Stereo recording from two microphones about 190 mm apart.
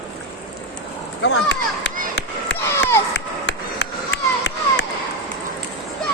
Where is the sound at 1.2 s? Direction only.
65° left (ahead or behind).